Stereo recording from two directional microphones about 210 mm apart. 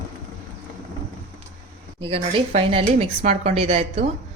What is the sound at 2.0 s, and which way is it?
Speech, 25° right (ahead or behind).